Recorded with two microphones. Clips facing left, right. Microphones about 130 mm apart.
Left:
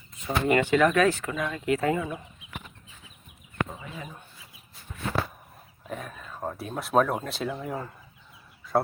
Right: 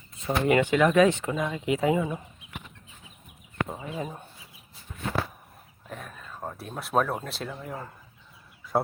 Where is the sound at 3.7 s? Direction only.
30° right (ahead or behind).